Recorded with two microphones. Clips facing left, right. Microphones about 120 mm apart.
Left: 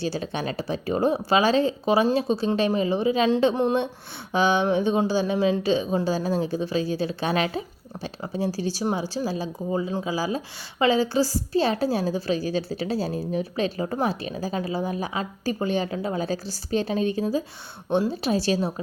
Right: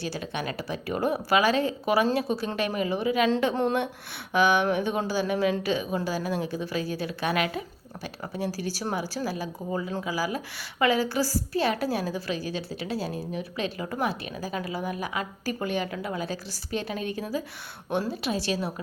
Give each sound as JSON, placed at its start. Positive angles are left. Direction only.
{"t": 0.0, "sound": "a woman's voice", "side_deg": 30}